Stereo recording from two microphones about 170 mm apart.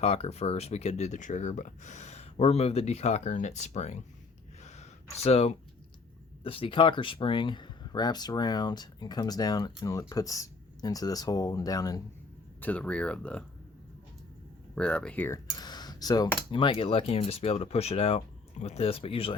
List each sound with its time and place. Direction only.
0.0 s speech: 40° left (ahead or behind)
4.6 s a sound: 40° left (ahead or behind)
6.4 s speech: 30° left (ahead or behind)
12.5 s speech: 10° left (ahead or behind)
14.8 s speech: 5° left (ahead or behind)
15.5 s computer keyboard: 25° left (ahead or behind)
16.5 s speech: 30° left (ahead or behind)